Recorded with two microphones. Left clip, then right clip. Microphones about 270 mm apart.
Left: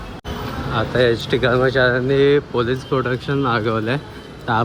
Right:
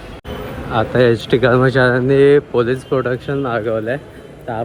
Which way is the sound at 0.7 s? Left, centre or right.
Centre.